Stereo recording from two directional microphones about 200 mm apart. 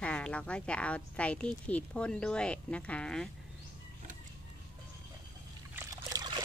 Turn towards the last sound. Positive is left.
turn(degrees=-20)  # may be behind; listen again after turning